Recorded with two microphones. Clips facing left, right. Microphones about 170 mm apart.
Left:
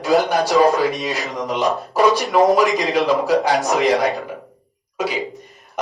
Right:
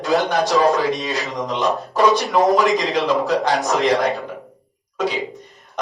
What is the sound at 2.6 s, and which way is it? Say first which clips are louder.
Speech: left 1 dB; centre (ahead or behind).